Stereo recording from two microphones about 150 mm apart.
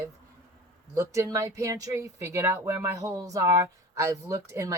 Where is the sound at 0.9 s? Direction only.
20° right (ahead or behind).